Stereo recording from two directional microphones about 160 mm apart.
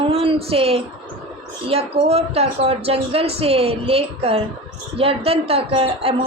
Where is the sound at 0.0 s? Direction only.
35° right (ahead or behind).